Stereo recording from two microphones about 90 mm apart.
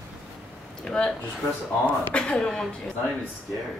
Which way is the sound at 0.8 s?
5° left (ahead or behind).